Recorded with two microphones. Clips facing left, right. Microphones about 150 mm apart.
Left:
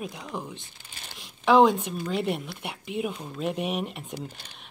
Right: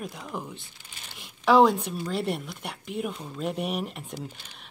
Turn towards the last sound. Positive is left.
turn(degrees=0)  # may be behind; listen again after turning